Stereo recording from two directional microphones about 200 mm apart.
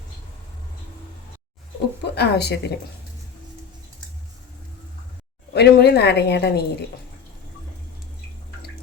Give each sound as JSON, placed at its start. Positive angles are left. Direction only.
{"t": 2.1, "sound": "a woman's voice", "side_deg": 55}
{"t": 5.5, "sound": "a woman's voice", "side_deg": 55}